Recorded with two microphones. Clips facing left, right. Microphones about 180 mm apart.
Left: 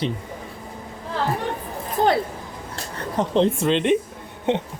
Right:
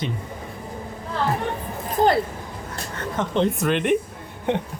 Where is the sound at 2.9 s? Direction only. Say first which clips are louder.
Left 3 dB; 35° left (ahead or behind).